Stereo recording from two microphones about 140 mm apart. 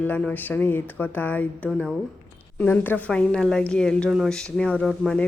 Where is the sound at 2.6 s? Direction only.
10° left (ahead or behind).